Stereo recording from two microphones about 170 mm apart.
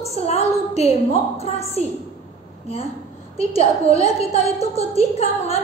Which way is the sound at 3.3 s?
35° left (ahead or behind).